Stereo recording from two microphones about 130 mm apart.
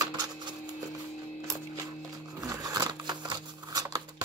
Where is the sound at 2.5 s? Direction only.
30° right (ahead or behind).